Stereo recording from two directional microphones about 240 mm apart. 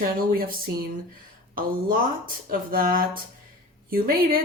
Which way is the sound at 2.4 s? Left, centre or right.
Right.